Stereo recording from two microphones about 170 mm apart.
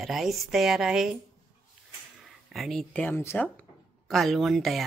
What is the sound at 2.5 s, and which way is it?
Speech, centre (ahead or behind).